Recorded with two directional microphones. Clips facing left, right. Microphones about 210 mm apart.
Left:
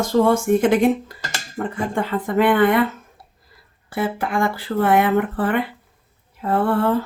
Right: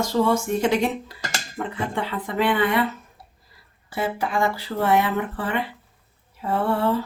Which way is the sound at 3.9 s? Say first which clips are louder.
Left 3 dB; 55° left (ahead or behind).